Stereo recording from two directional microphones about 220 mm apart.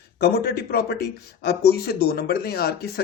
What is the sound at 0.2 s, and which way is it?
Speech, 45° left (ahead or behind).